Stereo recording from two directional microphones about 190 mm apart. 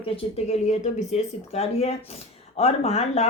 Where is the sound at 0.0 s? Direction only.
30° left (ahead or behind).